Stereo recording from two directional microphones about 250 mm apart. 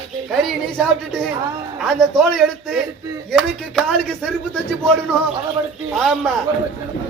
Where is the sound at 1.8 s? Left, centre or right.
Centre.